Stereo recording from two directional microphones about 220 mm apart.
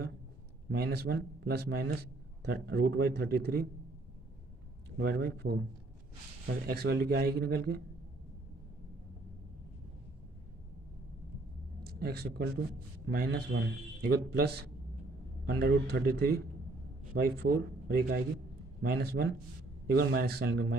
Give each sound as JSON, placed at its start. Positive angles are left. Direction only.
{"t": 0.7, "sound": "a man's voice", "side_deg": -50}
{"t": 4.9, "sound": "a man's voice", "side_deg": -50}
{"t": 11.8, "sound": "a man's voice", "side_deg": -45}